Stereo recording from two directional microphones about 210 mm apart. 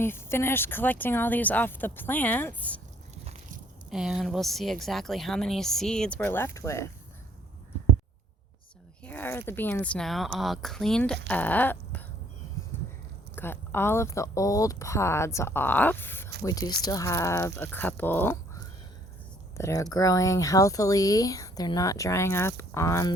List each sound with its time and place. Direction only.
0.0 s speech: 10° left (ahead or behind)
3.8 s speech: centre (ahead or behind); by 6.8 s 15° left (ahead or behind)
9.0 s speech: 10° left (ahead or behind)
11.3 s a sound: 5° left (ahead or behind)
13.3 s speech: 10° left (ahead or behind)